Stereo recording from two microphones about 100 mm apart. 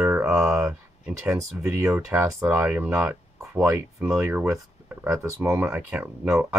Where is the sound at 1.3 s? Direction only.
30° right (ahead or behind).